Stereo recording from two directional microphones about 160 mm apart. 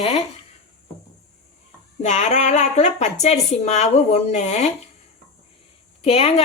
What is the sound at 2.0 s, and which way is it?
A woman's voice, 45° left (ahead or behind).